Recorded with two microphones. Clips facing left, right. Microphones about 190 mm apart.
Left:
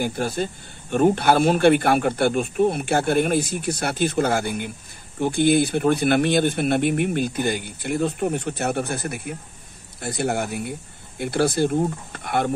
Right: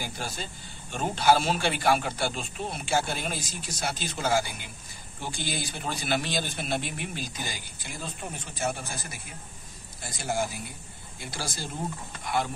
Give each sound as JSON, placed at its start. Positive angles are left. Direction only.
{"t": 0.0, "sound": "speech", "side_deg": 55}